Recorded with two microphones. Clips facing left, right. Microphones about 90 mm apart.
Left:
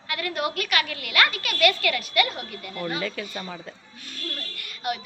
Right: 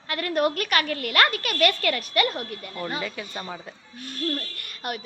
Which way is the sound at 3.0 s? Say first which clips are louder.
Left 2 dB; 20° right (ahead or behind).